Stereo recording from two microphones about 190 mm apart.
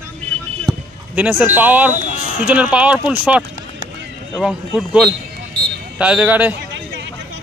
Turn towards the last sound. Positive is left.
turn(degrees=-10)  # may be behind; listen again after turning